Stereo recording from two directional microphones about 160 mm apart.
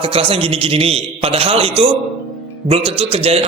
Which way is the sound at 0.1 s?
35° right (ahead or behind).